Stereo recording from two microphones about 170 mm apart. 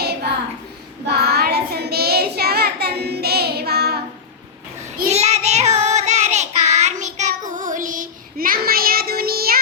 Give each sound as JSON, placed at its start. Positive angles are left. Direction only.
{"t": 0.0, "sound": "child singing", "side_deg": -70}
{"t": 5.0, "sound": "child singing", "side_deg": -40}